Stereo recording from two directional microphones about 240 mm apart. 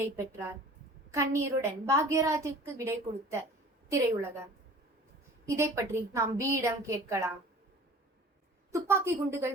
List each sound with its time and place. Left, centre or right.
0.0 s a woman's voice: centre
5.5 s a woman's voice: centre
8.7 s a woman's voice: centre